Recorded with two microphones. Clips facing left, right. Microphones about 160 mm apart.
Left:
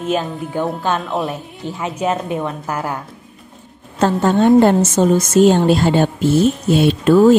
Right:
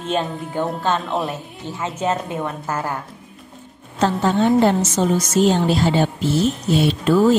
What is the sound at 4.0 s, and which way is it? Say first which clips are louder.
Speech: left 3 dB; 50° left (ahead or behind).